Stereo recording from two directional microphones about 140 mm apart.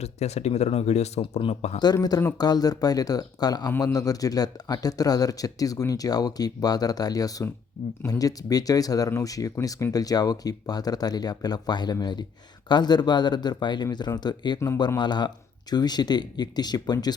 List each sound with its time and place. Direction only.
0.0 s speech: 50° left (ahead or behind)
1.8 s speech: 30° left (ahead or behind)